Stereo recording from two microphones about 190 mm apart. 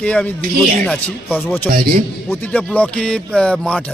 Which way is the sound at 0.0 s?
5° left (ahead or behind).